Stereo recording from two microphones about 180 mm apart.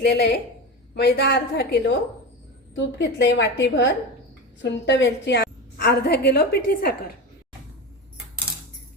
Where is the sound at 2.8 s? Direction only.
80° left; by 6.9 s 60° left (ahead or behind).